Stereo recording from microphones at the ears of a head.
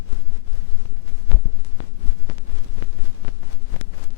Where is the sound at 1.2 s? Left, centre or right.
Left.